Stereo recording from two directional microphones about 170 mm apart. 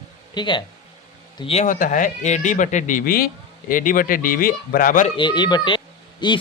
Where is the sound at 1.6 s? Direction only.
50° left (ahead or behind).